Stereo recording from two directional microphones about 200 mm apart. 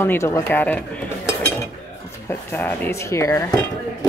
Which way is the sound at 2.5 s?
10° left (ahead or behind).